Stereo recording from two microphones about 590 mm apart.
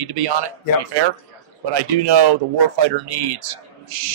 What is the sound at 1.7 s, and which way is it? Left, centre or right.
Speech, right.